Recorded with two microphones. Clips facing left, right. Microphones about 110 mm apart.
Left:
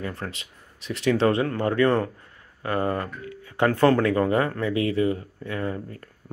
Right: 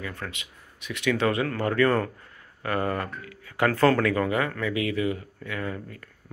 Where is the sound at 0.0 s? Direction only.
35° left (ahead or behind).